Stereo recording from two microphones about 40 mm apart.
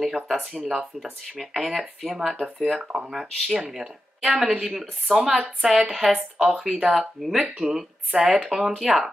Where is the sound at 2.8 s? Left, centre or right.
Right.